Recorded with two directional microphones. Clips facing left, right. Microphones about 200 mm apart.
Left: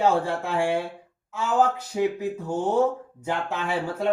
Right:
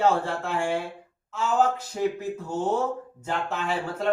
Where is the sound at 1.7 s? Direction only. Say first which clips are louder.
Left 2 dB; 15° left (ahead or behind).